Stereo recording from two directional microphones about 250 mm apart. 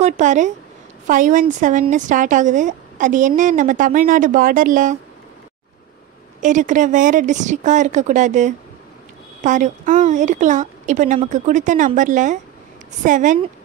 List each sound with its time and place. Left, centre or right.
0.0 s a woman's voice: right
6.4 s a woman's voice: right